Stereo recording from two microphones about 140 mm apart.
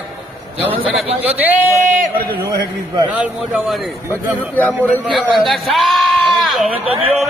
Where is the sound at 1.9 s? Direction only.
90° right.